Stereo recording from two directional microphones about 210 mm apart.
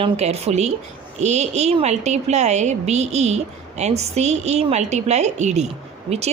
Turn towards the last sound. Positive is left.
turn(degrees=-30)  # may be behind; listen again after turning